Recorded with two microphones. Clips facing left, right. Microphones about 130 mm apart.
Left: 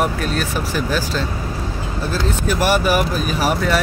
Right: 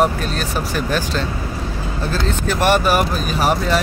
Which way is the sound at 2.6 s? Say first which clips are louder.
Right 2 dB; 50° right (ahead or behind).